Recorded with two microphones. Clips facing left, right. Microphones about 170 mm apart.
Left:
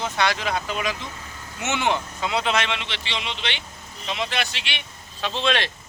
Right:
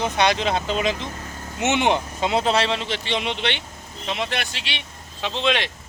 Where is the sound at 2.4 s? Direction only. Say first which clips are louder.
Right 4 dB; 35° right (ahead or behind); by 4.4 s 55° right (ahead or behind).